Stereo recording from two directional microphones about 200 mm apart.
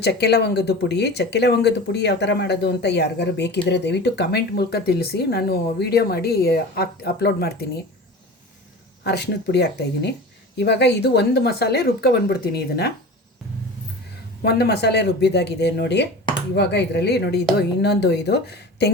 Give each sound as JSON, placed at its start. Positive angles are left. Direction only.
{"t": 0.0, "sound": "speech", "side_deg": 55}
{"t": 9.0, "sound": "speech", "side_deg": 55}
{"t": 14.4, "sound": "speech", "side_deg": 55}